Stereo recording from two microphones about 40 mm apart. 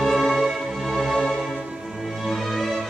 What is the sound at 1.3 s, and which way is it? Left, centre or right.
Music, centre.